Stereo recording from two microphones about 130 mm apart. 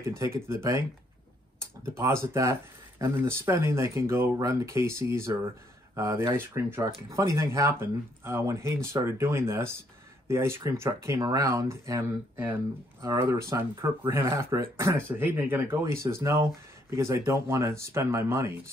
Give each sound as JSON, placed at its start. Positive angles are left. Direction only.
{"t": 0.0, "sound": "speech", "side_deg": -20}
{"t": 1.9, "sound": "speech", "side_deg": -20}